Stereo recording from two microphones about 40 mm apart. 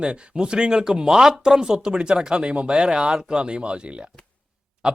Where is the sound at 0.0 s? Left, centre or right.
Right.